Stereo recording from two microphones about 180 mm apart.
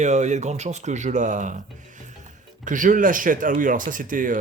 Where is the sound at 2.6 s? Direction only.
45° right (ahead or behind).